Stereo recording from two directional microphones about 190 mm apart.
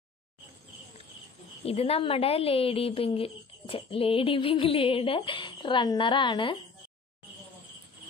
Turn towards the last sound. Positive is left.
turn(degrees=25)  # may be behind; listen again after turning